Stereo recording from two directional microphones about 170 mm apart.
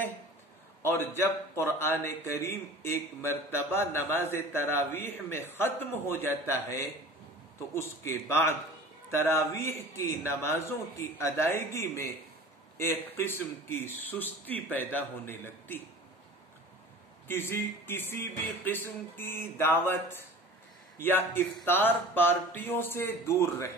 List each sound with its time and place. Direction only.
0.8 s a man's voice: 15° left (ahead or behind)
17.3 s a man's voice: 15° left (ahead or behind)